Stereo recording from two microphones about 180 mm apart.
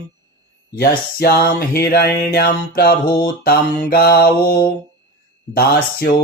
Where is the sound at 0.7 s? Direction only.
60° left (ahead or behind).